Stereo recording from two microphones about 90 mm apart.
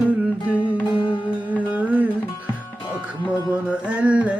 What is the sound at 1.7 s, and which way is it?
Music, 15° right (ahead or behind).